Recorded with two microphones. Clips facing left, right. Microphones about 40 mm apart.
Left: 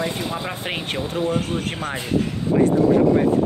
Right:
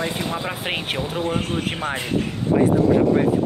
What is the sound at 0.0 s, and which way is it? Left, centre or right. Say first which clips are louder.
Speech: even; centre.